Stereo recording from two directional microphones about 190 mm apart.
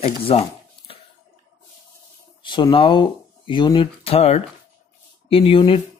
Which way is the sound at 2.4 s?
25° left (ahead or behind).